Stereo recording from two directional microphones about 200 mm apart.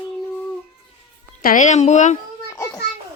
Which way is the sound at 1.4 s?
40° left (ahead or behind).